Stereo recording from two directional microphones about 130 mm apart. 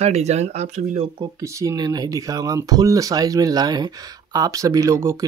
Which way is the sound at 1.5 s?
25° right (ahead or behind).